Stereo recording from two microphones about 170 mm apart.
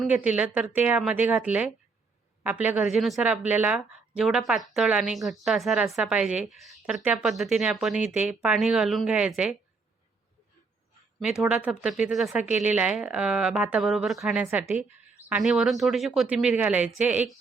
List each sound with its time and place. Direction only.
0.0 s a woman's voice: 10° right (ahead or behind)
11.2 s a woman's voice: 5° right (ahead or behind)